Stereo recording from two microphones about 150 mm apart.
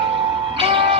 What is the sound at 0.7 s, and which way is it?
Music, 35° right (ahead or behind).